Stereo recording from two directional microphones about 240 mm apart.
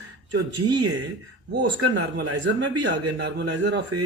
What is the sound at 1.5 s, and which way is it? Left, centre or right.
A man's voice, right.